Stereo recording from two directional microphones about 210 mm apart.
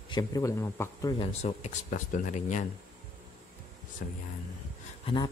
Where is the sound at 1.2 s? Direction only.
30° left (ahead or behind).